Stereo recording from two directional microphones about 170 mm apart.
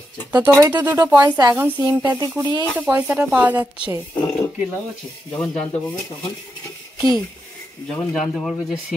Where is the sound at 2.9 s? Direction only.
10° right (ahead or behind).